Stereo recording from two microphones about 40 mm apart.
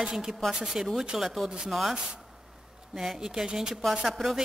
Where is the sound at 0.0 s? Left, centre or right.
Centre.